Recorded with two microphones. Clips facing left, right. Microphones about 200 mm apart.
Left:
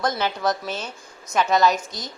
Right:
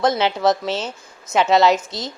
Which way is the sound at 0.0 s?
20° right (ahead or behind).